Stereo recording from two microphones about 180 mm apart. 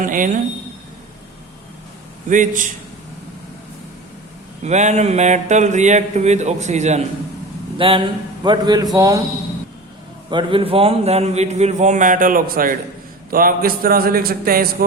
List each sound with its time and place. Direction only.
0.0 s speech: 50° right (ahead or behind)
2.3 s speech: 45° right (ahead or behind)
4.6 s a sound: 40° right (ahead or behind)
7.8 s a man's voice: 30° right (ahead or behind)
10.2 s a sound: 25° right (ahead or behind); by 12.7 s 50° right (ahead or behind)
13.3 s a man's voice: 55° right (ahead or behind)